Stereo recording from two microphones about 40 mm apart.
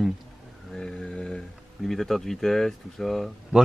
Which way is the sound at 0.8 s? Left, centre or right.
Centre.